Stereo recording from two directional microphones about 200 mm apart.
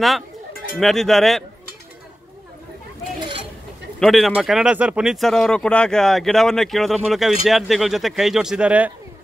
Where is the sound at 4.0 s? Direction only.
Centre (ahead or behind).